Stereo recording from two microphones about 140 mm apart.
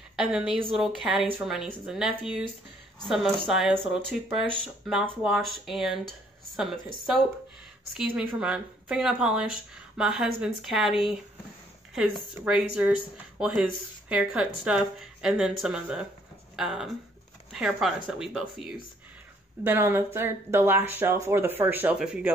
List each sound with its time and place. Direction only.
0.1 s a sound: centre (ahead or behind)
0.7 s speech: centre (ahead or behind)
8.2 s speech: 5° right (ahead or behind)
19.6 s speech: 15° right (ahead or behind)